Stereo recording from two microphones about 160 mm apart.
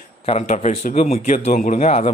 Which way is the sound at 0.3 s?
40° left (ahead or behind).